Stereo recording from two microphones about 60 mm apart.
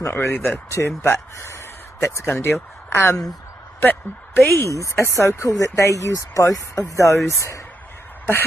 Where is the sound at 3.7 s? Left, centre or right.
Left.